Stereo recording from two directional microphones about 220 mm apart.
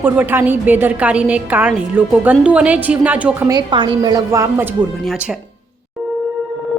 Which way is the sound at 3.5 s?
20° right (ahead or behind).